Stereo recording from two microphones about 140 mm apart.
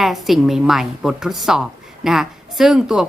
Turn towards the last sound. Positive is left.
turn(degrees=-5)  # may be behind; listen again after turning